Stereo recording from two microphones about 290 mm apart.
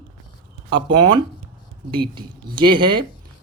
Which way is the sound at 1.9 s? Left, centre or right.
Centre.